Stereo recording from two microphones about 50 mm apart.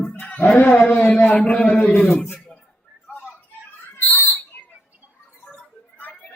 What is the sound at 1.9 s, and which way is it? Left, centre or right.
Speech, centre.